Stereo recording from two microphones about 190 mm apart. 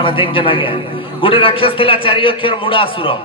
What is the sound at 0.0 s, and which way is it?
Speech, 25° left (ahead or behind).